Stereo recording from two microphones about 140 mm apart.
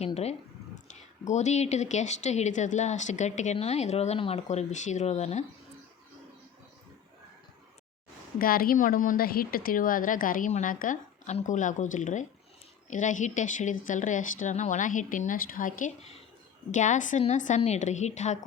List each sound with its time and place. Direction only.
0.0 s speech: 50° left (ahead or behind)
8.4 s a woman's voice: 90° left; by 15.9 s 75° left (ahead or behind)
16.7 s speech: 60° left (ahead or behind)